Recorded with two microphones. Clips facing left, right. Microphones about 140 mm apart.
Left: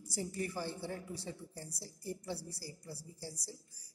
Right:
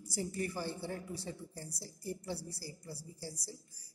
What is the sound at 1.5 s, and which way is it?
Speech, 25° left (ahead or behind).